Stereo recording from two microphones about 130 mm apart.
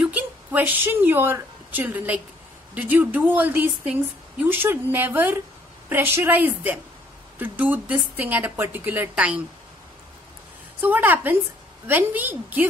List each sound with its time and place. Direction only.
0.0 s a woman's voice: 10° right (ahead or behind)
10.8 s speech: 15° right (ahead or behind)